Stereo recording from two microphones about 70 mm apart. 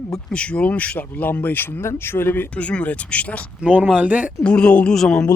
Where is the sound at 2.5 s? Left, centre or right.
Centre.